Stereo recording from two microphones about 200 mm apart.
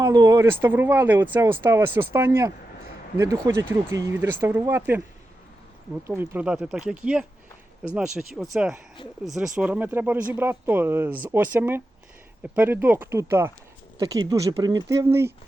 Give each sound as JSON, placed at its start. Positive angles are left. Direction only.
{"t": 0.0, "sound": "speech", "side_deg": -20}
{"t": 6.1, "sound": "speech", "side_deg": -10}